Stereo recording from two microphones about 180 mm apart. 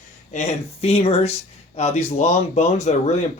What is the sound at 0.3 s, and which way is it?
Speech, 35° left (ahead or behind).